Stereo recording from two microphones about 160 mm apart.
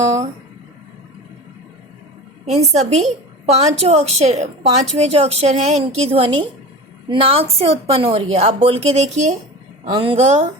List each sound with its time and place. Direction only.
2.5 s a woman's voice: 45° right (ahead or behind)
9.8 s a woman's voice: 30° right (ahead or behind)
10.2 s a woman's voice: 45° right (ahead or behind)